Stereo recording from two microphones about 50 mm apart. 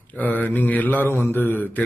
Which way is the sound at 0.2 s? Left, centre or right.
Left.